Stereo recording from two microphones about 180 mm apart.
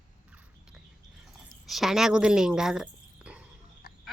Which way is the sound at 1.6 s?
Centre (ahead or behind).